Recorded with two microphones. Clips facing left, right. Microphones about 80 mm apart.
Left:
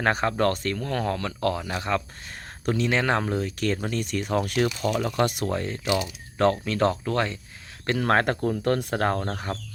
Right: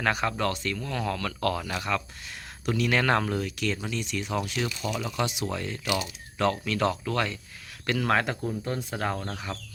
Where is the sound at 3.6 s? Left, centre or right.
Left.